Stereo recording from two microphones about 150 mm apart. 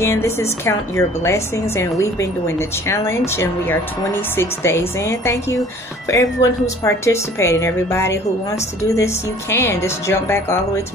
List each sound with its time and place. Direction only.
0.0 s a woman's voice: 20° left (ahead or behind)